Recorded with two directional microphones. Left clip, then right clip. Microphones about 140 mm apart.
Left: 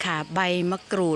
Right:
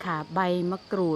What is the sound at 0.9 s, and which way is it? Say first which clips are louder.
Speech: left 2 dB; 20° left (ahead or behind).